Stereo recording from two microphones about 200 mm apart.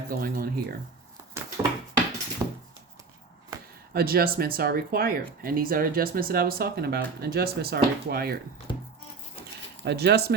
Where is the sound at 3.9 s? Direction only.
50° right (ahead or behind).